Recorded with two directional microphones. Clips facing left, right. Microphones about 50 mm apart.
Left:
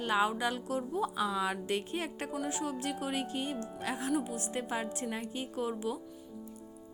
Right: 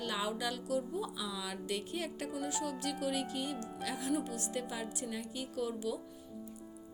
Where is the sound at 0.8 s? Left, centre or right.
Left.